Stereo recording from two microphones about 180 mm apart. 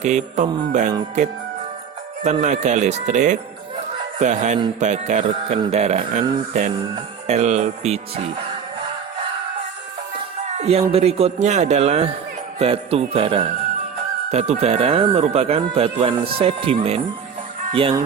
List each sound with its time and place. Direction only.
0.0 s speech: 40° right (ahead or behind)
0.7 s music: 45° right (ahead or behind)
2.2 s speech: 40° right (ahead or behind)
10.6 s speech: 35° right (ahead or behind)